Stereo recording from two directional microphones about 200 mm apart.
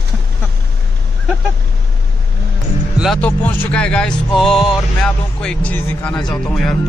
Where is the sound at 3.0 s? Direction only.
5° left (ahead or behind).